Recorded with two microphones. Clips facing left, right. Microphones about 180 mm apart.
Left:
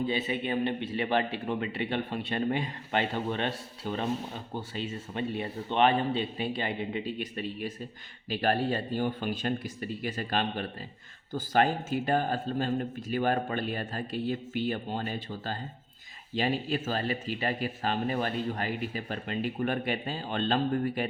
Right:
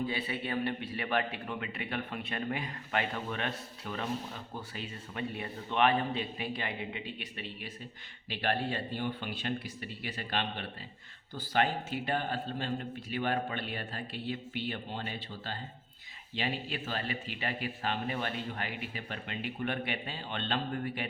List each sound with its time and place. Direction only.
0.1 s a man's voice: 20° left (ahead or behind); by 21.1 s 40° left (ahead or behind)